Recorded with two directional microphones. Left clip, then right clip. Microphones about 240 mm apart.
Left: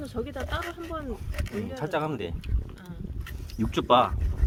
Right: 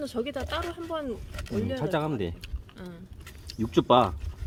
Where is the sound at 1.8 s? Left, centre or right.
Left.